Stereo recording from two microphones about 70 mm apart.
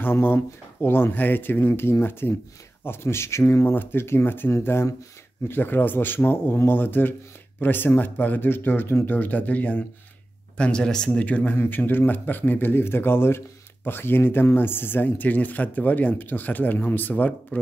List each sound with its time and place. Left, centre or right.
0.0 s speech: left
5.5 s speech: left
11.5 s speech: left